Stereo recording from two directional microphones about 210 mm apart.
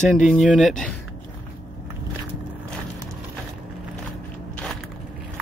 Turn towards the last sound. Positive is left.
turn(degrees=5)  # may be behind; listen again after turning